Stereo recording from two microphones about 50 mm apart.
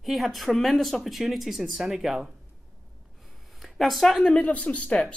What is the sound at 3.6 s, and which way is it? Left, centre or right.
Speech, centre.